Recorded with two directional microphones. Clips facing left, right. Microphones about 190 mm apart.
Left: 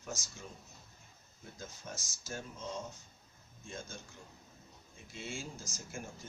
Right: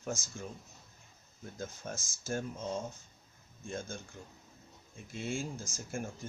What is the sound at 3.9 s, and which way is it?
Speech, 55° right (ahead or behind).